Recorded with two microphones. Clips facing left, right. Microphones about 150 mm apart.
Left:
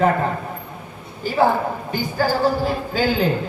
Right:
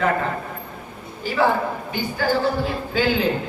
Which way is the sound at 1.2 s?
45° left (ahead or behind).